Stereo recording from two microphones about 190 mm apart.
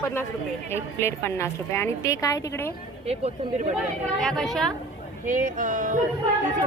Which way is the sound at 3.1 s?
35° right (ahead or behind).